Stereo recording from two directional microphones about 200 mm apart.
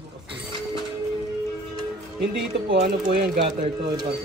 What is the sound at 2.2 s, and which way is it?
Speech, 55° right (ahead or behind).